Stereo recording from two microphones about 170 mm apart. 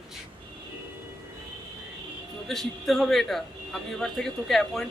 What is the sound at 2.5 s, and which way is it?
A man's voice, centre (ahead or behind).